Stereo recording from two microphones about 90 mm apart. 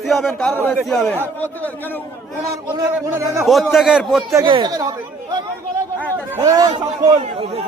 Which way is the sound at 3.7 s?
5° right (ahead or behind).